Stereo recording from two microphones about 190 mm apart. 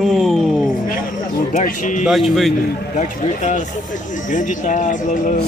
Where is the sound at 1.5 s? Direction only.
40° left (ahead or behind).